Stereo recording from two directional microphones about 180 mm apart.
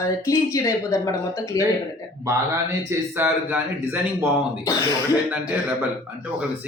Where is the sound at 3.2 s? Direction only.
10° right (ahead or behind).